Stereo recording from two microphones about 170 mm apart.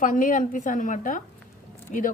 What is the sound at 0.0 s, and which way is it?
A woman's voice, 50° left (ahead or behind).